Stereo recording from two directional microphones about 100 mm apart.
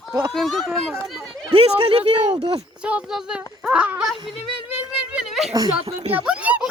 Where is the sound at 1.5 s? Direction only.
70° right (ahead or behind).